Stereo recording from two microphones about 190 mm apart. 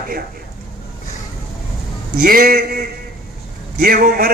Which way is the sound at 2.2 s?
50° right (ahead or behind).